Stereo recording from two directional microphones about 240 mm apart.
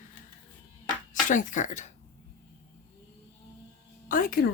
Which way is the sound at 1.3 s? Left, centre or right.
Left.